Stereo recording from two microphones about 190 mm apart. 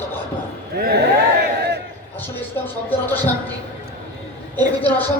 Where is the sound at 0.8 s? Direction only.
50° right (ahead or behind).